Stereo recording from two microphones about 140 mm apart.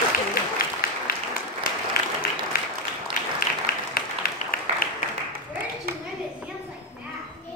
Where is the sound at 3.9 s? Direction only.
90° left.